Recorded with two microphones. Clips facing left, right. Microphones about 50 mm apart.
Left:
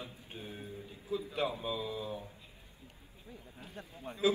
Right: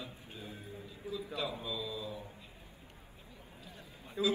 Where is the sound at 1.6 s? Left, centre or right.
Left.